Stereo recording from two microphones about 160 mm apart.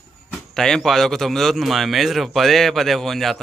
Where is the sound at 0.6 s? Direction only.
5° left (ahead or behind).